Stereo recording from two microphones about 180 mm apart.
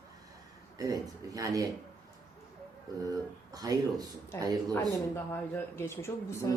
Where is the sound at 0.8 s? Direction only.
20° right (ahead or behind).